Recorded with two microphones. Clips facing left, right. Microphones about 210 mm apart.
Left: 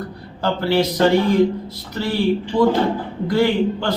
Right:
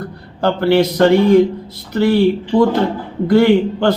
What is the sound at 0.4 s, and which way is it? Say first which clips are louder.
Speech: right 5 dB; 55° right (ahead or behind).